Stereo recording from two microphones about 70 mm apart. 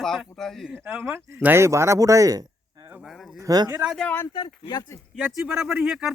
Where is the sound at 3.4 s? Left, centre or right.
Right.